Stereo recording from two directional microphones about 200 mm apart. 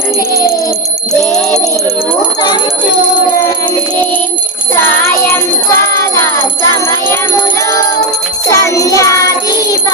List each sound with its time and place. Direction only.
1.2 s music: centre (ahead or behind)
4.7 s child singing: 10° left (ahead or behind)
6.8 s music: 10° left (ahead or behind)
8.4 s music: 15° left (ahead or behind)